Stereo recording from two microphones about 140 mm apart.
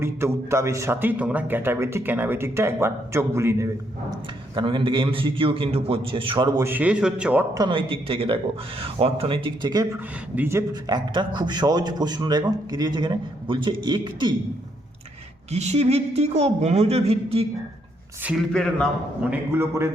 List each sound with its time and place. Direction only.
0.0 s a man's voice: 20° right (ahead or behind)
4.5 s a man's voice: 35° right (ahead or behind)
6.6 s a man's voice: 15° right (ahead or behind)
7.5 s a man's voice: 35° right (ahead or behind)
10.3 s a man's voice: 15° right (ahead or behind)
10.8 s a man's voice: 30° right (ahead or behind)
15.5 s speech: 50° right (ahead or behind)
18.3 s speech: 5° left (ahead or behind)
19.2 s a man's voice: 15° right (ahead or behind)